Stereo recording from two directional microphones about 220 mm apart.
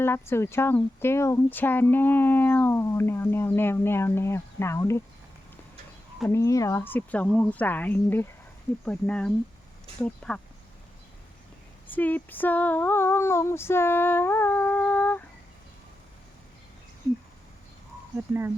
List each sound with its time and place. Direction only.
0.0 s speech: 10° left (ahead or behind)
6.2 s speech: 15° left (ahead or behind)
11.9 s speech: 10° left (ahead or behind)